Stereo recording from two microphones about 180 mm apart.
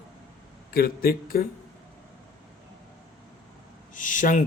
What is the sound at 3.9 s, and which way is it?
Speech, 45° left (ahead or behind).